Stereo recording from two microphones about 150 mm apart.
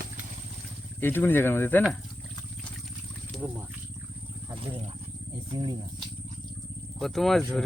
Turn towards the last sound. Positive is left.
turn(degrees=0)  # may be behind; listen again after turning